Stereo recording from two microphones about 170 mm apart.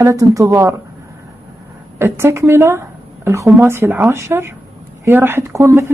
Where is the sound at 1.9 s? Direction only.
15° right (ahead or behind).